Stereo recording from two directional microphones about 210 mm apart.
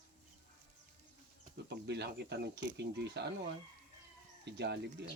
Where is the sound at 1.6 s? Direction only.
55° right (ahead or behind).